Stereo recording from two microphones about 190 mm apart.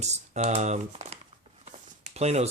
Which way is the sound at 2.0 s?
35° right (ahead or behind).